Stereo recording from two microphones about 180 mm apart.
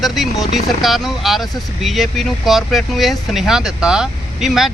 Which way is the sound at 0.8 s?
Centre (ahead or behind).